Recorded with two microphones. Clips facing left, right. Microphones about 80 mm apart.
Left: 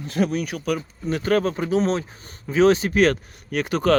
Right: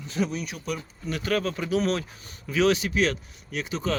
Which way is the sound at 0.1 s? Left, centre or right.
Left.